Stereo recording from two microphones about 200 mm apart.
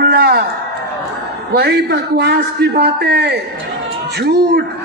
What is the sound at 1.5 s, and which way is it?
A man's voice, 55° right (ahead or behind).